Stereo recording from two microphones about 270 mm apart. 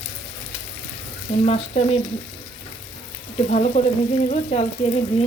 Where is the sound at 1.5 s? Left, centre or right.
Left.